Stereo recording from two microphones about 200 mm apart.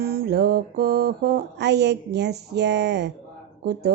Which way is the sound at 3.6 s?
50° right (ahead or behind).